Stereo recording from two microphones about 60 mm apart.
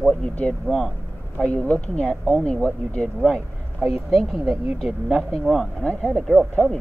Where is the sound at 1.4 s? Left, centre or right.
Left.